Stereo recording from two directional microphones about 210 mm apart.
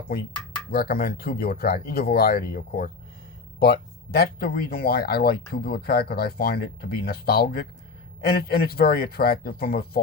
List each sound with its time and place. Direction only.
0.7 s speech: 45° left (ahead or behind)